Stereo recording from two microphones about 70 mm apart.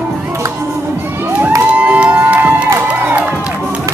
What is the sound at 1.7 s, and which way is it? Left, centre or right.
Crowd, centre.